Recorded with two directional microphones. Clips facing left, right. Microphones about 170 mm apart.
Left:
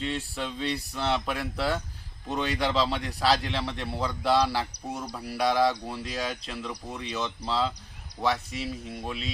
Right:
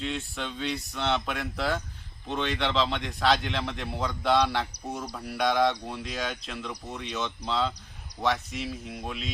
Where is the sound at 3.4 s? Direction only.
Centre (ahead or behind).